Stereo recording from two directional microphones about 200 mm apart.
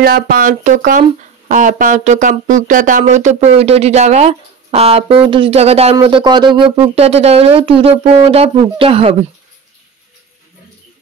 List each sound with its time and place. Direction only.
0.0 s speech: 50° right (ahead or behind); by 9.1 s 30° right (ahead or behind)